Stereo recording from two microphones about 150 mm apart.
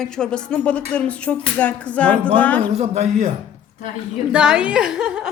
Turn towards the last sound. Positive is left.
turn(degrees=-5)  # may be behind; listen again after turning